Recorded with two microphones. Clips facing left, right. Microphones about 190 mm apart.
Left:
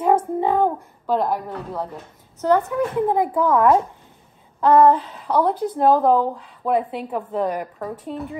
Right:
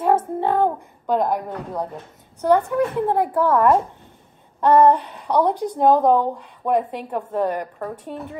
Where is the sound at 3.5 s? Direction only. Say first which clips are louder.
Left 1 dB; 5° left (ahead or behind).